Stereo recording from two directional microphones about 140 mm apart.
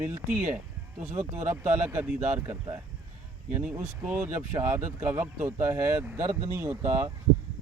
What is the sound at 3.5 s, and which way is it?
Speech, 15° right (ahead or behind).